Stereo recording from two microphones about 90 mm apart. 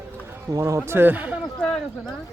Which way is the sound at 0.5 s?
40° right (ahead or behind).